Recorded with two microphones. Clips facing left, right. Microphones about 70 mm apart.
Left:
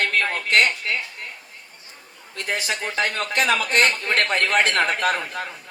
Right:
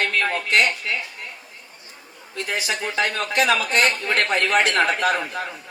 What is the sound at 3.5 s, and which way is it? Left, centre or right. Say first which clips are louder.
Speech: left 2 dB; left.